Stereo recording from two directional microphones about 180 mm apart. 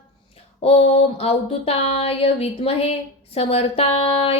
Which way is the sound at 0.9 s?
35° left (ahead or behind).